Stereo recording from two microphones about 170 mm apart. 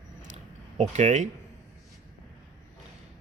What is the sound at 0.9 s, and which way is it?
Speech, 45° right (ahead or behind).